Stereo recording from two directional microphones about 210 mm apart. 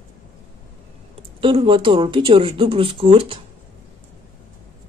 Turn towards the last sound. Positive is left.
turn(degrees=-25)  # may be behind; listen again after turning